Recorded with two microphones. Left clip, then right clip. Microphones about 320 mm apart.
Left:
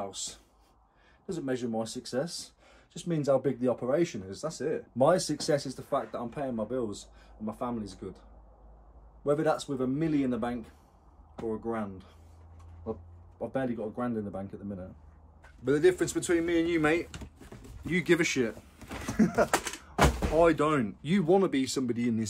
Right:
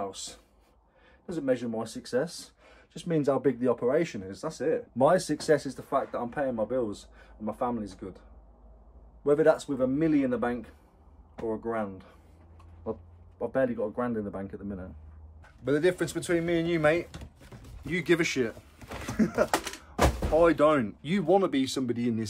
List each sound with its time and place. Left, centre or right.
0.0 s speech: centre
9.2 s speech: centre
13.4 s speech: centre
15.6 s speech: centre